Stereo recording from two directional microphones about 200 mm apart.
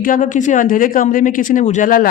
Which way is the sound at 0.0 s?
40° left (ahead or behind).